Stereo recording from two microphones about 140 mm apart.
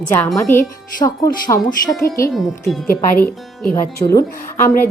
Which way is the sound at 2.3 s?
Centre (ahead or behind).